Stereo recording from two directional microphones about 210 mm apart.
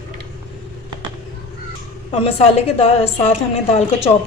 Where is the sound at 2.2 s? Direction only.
30° left (ahead or behind).